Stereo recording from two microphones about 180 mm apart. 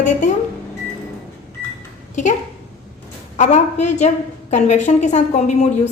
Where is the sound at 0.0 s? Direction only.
40° left (ahead or behind).